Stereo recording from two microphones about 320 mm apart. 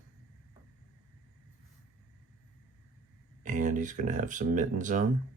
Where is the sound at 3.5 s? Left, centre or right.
Right.